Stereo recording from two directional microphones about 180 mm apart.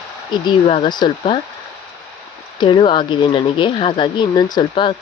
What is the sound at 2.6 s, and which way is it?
Speech, 25° left (ahead or behind).